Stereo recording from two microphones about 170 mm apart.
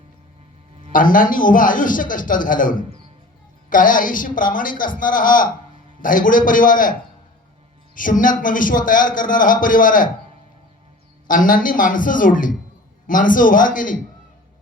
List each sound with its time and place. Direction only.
0.9 s a man's voice: 55° left (ahead or behind)
7.9 s a man's voice: 50° left (ahead or behind)
11.3 s a man's voice: 55° left (ahead or behind)